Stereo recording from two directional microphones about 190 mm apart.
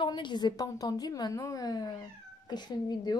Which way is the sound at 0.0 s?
25° left (ahead or behind).